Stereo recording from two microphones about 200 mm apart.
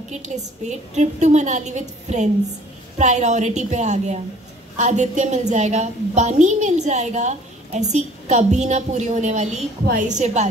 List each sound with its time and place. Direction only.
0.1 s a woman's voice: 35° right (ahead or behind)